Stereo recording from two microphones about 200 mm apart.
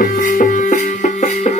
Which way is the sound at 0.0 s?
40° left (ahead or behind).